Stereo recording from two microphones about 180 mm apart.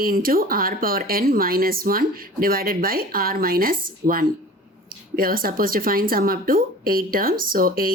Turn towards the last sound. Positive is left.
turn(degrees=-50)  # may be behind; listen again after turning